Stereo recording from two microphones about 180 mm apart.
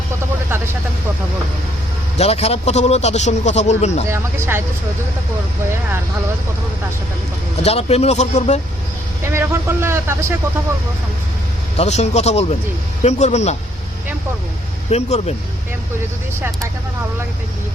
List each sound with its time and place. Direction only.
2.1 s a man's voice: 35° left (ahead or behind)
4.1 s speech: 15° right (ahead or behind)
7.6 s a man's voice: 35° left (ahead or behind)
9.2 s speech: 15° right (ahead or behind)
11.8 s a man's voice: 35° left (ahead or behind)
14.8 s a man's voice: 35° left (ahead or behind)